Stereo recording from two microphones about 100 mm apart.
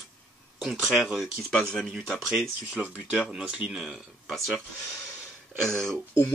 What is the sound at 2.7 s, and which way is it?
Speech, 15° right (ahead or behind).